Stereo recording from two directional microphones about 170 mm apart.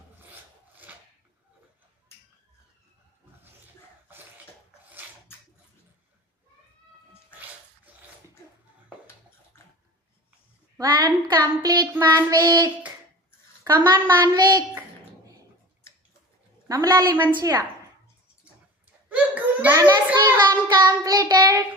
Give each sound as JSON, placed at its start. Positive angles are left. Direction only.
{"t": 0.9, "sound": "a sound", "side_deg": -10}
{"t": 10.8, "sound": "child singing", "side_deg": -25}
{"t": 13.9, "sound": "child singing", "side_deg": -25}
{"t": 16.6, "sound": "a woman's voice", "side_deg": -20}
{"t": 17.3, "sound": "child singing", "side_deg": -20}
{"t": 19.0, "sound": "a sound", "side_deg": -10}
{"t": 19.7, "sound": "a sound", "side_deg": -20}
{"t": 20.1, "sound": "child singing", "side_deg": -10}
{"t": 20.7, "sound": "child singing", "side_deg": -25}